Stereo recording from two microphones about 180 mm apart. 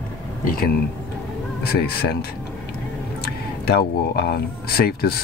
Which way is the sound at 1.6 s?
60° left (ahead or behind).